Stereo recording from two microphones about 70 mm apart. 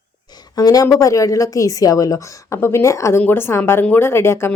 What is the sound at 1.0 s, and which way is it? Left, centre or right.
A woman's voice, left.